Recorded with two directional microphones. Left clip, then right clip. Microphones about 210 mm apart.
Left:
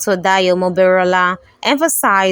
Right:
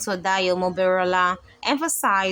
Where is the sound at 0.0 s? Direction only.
35° left (ahead or behind).